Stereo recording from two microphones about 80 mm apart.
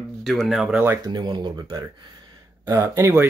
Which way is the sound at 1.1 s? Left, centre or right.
Right.